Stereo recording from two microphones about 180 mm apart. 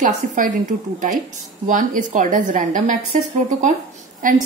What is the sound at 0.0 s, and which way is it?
Speech, 45° right (ahead or behind).